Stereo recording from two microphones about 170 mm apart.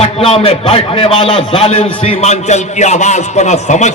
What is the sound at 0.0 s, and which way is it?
A man's voice, 35° left (ahead or behind).